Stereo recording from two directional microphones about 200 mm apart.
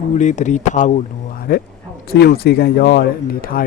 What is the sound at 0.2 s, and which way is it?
Speech, 35° left (ahead or behind).